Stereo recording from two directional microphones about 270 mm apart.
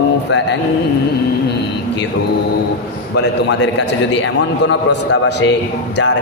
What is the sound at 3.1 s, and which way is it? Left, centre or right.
Speech, left.